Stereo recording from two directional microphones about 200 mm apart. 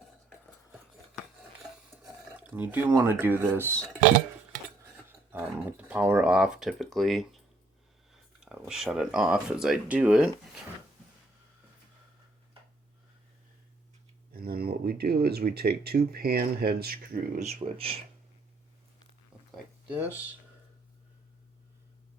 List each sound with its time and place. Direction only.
0.3 s cutlery: centre (ahead or behind)
2.3 s speech: 5° right (ahead or behind)
5.0 s speech: 10° right (ahead or behind)
14.3 s speech: 50° right (ahead or behind)
17.4 s speech: 30° right (ahead or behind)
19.3 s a sound: 5° right (ahead or behind)